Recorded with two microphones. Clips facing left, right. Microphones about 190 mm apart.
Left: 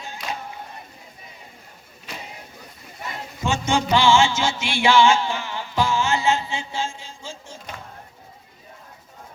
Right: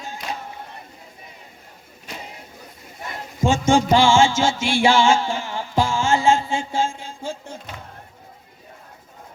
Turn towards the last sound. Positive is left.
turn(degrees=-55)  # may be behind; listen again after turning